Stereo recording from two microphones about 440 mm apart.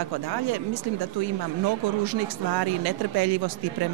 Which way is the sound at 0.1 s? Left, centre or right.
Right.